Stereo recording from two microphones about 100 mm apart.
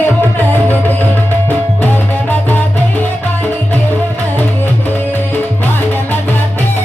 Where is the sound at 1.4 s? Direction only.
15° left (ahead or behind).